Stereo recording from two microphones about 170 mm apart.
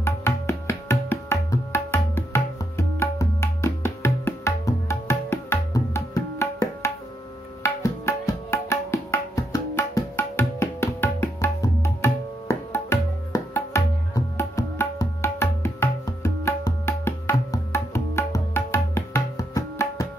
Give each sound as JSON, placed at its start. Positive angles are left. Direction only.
{"t": 0.0, "sound": "music", "side_deg": 15}
{"t": 7.6, "sound": "tabla", "side_deg": 15}